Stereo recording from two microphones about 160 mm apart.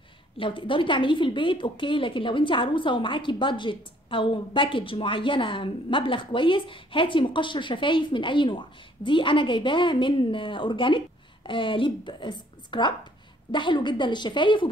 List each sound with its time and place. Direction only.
0.4 s a woman's voice: 30° left (ahead or behind)